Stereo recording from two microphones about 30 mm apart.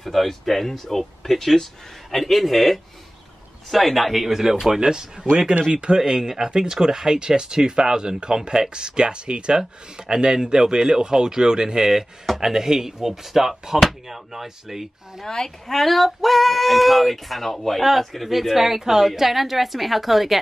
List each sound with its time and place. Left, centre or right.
0.0 s speech: centre
4.3 s speech: centre
4.8 s speech: right
5.9 s speech: right
15.2 s speech: left
15.6 s speech: centre
18.5 s speech: centre